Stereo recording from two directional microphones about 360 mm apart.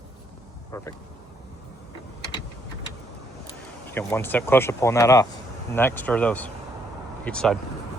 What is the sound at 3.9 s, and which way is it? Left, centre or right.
Speech, centre.